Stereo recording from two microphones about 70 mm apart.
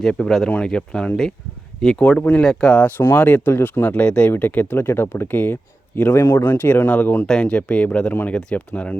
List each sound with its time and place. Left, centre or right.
0.0 s speech: centre
2.8 s speech: left